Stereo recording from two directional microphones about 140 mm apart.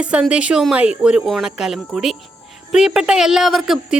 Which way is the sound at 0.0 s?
10° right (ahead or behind).